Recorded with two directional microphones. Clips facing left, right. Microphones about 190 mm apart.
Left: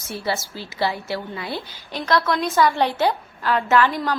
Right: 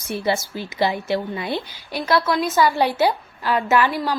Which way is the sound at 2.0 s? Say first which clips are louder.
Right 1 dB; 5° right (ahead or behind).